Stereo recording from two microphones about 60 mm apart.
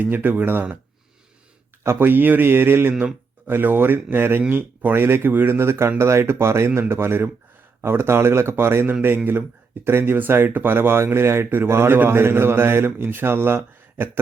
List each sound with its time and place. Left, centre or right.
0.0 s speech: right
1.8 s speech: right